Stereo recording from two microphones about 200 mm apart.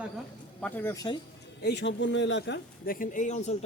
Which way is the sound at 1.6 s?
60° left (ahead or behind).